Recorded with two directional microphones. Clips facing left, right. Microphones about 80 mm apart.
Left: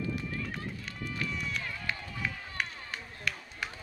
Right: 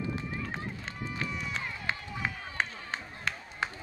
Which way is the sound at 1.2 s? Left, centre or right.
Right.